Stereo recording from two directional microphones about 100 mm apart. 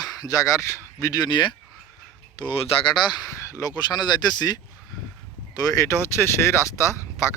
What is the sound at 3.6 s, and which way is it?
Speech, 40° left (ahead or behind).